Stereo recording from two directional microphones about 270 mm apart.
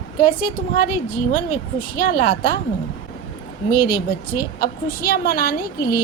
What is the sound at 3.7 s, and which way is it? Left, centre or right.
A woman's voice, left.